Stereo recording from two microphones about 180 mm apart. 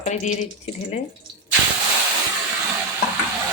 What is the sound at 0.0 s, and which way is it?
Speech, 40° left (ahead or behind).